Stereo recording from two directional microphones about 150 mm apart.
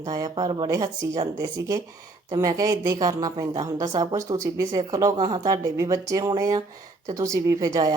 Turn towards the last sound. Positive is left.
turn(degrees=-25)  # may be behind; listen again after turning